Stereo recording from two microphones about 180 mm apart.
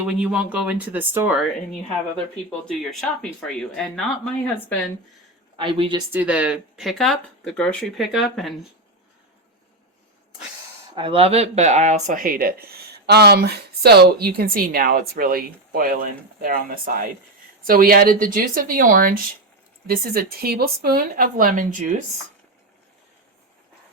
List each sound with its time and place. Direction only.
0.1 s speech: 5° right (ahead or behind)
2.6 s speech: centre (ahead or behind)
5.5 s a woman's voice: 30° right (ahead or behind)
6.1 s speech: 5° right (ahead or behind)
10.9 s speech: 30° right (ahead or behind); by 21.8 s 45° right (ahead or behind)